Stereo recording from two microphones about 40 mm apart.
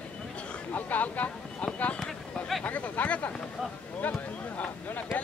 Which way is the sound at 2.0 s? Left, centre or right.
Centre.